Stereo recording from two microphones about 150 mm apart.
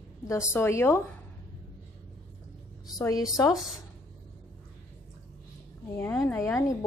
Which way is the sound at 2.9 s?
25° left (ahead or behind).